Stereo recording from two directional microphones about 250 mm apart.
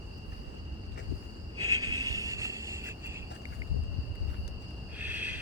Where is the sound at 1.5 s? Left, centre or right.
Centre.